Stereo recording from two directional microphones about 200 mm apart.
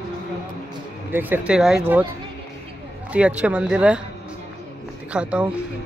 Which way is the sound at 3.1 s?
5° right (ahead or behind).